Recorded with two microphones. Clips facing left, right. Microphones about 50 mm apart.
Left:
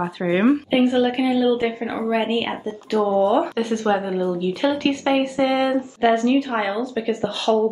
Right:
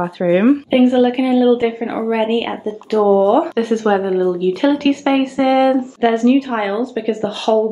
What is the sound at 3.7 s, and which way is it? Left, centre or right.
Speech, right.